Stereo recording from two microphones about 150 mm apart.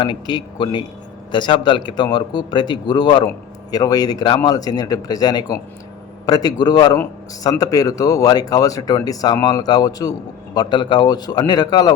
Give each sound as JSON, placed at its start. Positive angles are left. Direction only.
{"t": 0.0, "sound": "a man's voice", "side_deg": 30}